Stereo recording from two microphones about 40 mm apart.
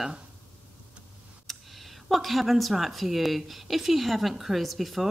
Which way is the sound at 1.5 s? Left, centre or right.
Centre.